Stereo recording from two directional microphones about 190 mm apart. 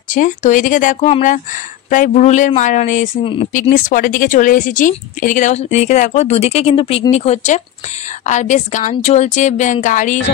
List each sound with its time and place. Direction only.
0.1 s speech: 40° left (ahead or behind)